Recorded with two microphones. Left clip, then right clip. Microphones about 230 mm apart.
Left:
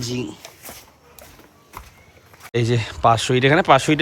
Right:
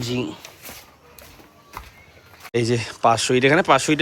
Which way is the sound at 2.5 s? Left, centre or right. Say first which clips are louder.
Even; centre.